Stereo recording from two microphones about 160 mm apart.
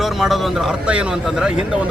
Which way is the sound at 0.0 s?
Centre (ahead or behind).